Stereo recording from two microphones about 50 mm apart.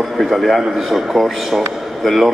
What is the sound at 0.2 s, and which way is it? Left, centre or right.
A man's voice, centre.